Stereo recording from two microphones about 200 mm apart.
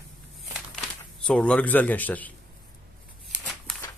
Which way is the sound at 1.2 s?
5° left (ahead or behind).